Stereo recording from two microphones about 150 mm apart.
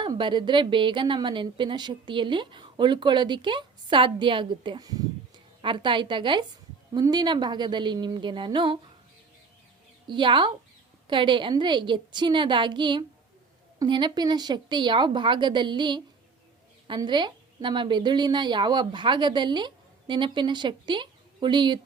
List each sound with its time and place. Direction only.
0.0 s a woman's voice: 30° right (ahead or behind)
10.1 s a woman's voice: 30° right (ahead or behind)